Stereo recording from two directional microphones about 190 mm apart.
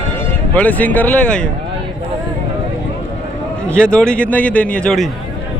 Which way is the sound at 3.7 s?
5° left (ahead or behind).